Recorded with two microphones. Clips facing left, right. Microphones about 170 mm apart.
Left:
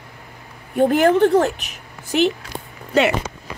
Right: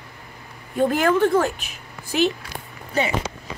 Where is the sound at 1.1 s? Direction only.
35° left (ahead or behind).